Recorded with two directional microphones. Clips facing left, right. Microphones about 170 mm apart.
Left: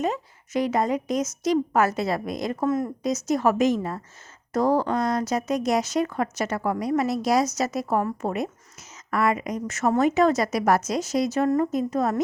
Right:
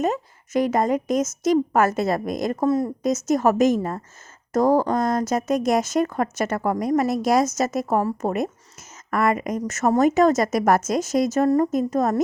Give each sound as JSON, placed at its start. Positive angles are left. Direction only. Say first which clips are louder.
{"t": 0.0, "sound": "a woman's voice", "louder": "right 3 dB", "side_deg": -45}
{"t": 3.0, "sound": "a woman's voice", "louder": "right 2 dB", "side_deg": -50}